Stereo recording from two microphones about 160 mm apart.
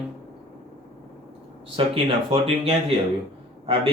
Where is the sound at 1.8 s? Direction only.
30° right (ahead or behind).